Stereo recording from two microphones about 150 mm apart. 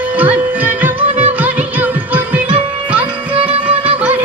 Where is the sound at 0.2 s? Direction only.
10° right (ahead or behind).